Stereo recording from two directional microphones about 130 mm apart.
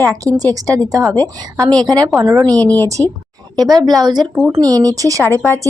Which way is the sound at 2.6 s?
10° left (ahead or behind).